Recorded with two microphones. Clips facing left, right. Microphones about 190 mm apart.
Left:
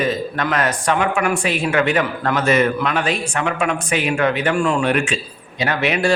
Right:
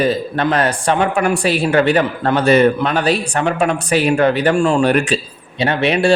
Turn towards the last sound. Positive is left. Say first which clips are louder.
# right 4 dB
turn(degrees=-30)  # may be behind; listen again after turning